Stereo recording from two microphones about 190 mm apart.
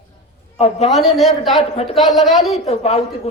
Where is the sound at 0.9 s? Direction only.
Centre (ahead or behind).